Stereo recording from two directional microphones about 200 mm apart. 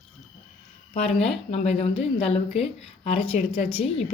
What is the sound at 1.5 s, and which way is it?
Speech, 30° left (ahead or behind).